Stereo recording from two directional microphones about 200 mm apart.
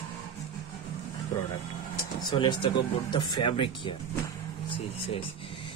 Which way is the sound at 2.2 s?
20° left (ahead or behind).